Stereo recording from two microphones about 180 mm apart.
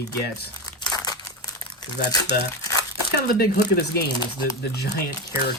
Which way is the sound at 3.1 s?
65° left (ahead or behind).